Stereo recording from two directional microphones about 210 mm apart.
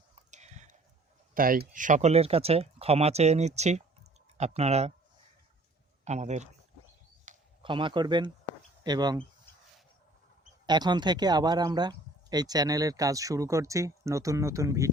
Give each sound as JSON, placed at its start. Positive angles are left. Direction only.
{"t": 0.3, "sound": "a sound", "side_deg": -35}
{"t": 1.3, "sound": "speech", "side_deg": -40}
{"t": 6.1, "sound": "speech", "side_deg": -35}
{"t": 7.3, "sound": "a sound", "side_deg": -35}
{"t": 7.6, "sound": "speech", "side_deg": -25}
{"t": 10.7, "sound": "speech", "side_deg": -20}